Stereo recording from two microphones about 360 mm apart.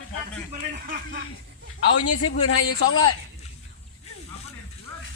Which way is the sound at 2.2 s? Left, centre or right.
Left.